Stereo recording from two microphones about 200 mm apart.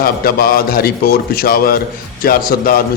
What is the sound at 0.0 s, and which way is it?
A man's voice, 50° left (ahead or behind).